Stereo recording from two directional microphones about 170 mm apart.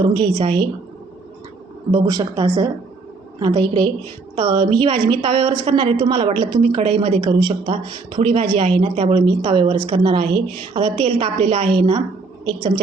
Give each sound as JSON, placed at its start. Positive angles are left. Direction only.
{"t": 0.0, "sound": "speech", "side_deg": -25}
{"t": 1.9, "sound": "speech", "side_deg": -25}